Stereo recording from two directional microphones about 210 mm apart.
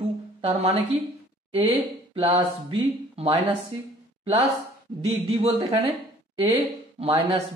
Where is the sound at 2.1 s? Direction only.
25° right (ahead or behind).